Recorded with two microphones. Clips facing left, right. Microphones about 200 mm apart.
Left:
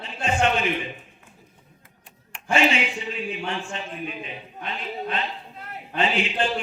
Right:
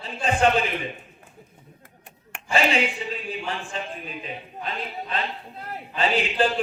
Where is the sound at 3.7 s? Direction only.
35° right (ahead or behind).